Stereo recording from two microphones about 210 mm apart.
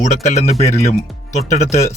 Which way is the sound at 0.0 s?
35° left (ahead or behind).